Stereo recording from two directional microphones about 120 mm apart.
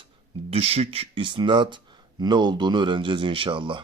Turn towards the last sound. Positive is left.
turn(degrees=-45)  # may be behind; listen again after turning